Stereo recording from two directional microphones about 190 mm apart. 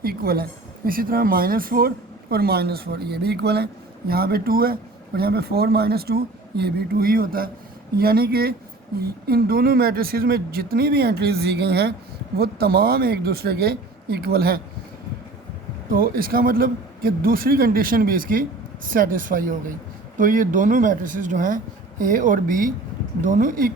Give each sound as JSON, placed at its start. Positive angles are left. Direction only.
{"t": 0.0, "sound": "a sound", "side_deg": -50}
{"t": 0.9, "sound": "speech", "side_deg": -50}
{"t": 15.9, "sound": "speech", "side_deg": -50}